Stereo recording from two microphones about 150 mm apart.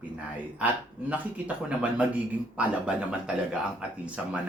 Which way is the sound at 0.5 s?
10° right (ahead or behind).